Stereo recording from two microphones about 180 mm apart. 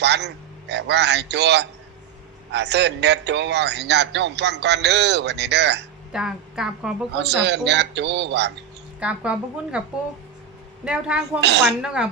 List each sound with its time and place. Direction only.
0.0 s a man's voice: 70° right (ahead or behind)
6.1 s a woman's voice: 5° right (ahead or behind)
7.1 s a man's voice: 70° right (ahead or behind)
9.0 s a woman's voice: 5° right (ahead or behind)
10.8 s a woman's voice: 5° right (ahead or behind)
11.3 s a man's voice: 70° right (ahead or behind)